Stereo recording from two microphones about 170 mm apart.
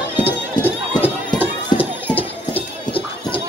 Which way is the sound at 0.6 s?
10° left (ahead or behind).